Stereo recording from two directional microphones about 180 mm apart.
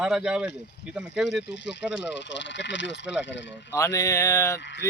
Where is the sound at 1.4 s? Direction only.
75° left (ahead or behind).